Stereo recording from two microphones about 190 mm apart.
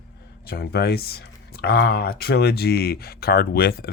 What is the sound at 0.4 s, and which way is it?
Speech, 55° left (ahead or behind).